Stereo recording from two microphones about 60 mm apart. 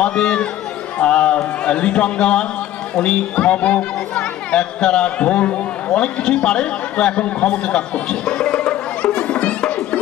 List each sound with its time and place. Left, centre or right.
0.0 s speech: centre
0.9 s a sound: centre
3.0 s speech: centre